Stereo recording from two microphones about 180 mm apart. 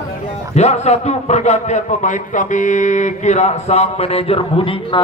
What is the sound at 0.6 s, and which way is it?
A man's voice, 40° left (ahead or behind).